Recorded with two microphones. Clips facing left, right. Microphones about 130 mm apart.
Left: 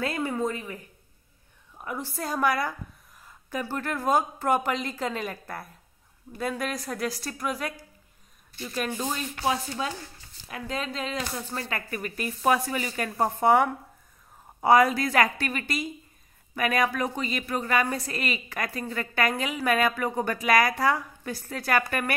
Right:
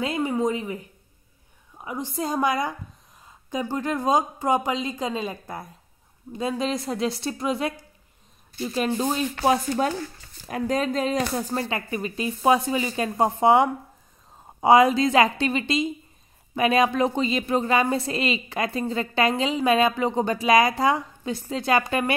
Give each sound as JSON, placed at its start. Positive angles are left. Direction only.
{"t": 0.0, "sound": "a woman's voice", "side_deg": -15}
{"t": 1.8, "sound": "a woman's voice", "side_deg": -15}
{"t": 9.4, "sound": "speech", "side_deg": -50}